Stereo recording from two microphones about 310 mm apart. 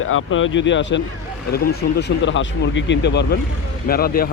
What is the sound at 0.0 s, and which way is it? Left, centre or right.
Speech, left.